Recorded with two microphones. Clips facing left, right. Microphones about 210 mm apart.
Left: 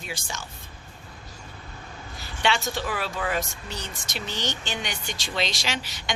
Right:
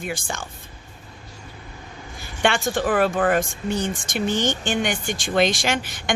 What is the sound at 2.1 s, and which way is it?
Speech, 50° right (ahead or behind).